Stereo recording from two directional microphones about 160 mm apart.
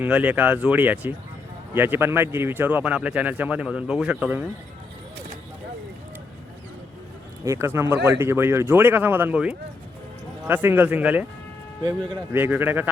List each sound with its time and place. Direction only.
0.0 s speech: 10° right (ahead or behind)
7.4 s speech: 20° right (ahead or behind)
11.8 s speech: 25° right (ahead or behind)
12.3 s speech: 15° right (ahead or behind)